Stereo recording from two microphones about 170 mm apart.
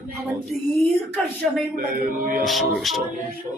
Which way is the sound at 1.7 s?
55° right (ahead or behind).